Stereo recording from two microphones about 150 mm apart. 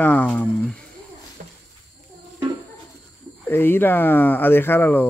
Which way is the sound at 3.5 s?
15° left (ahead or behind).